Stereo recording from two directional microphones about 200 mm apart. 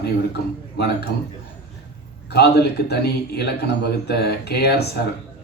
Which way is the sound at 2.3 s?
55° left (ahead or behind).